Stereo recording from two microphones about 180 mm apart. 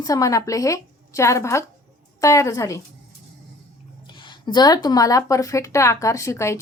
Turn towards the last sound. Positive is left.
turn(degrees=15)  # may be behind; listen again after turning